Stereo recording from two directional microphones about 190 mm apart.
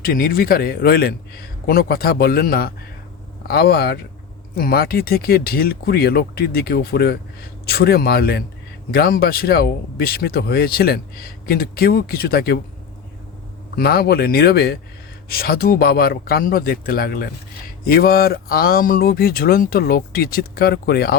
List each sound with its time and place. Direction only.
0.0 s speech: 50° left (ahead or behind)
13.7 s speech: 55° left (ahead or behind)